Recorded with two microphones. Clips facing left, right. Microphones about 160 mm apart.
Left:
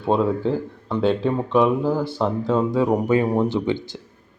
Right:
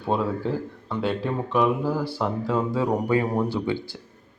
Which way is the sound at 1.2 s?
20° left (ahead or behind).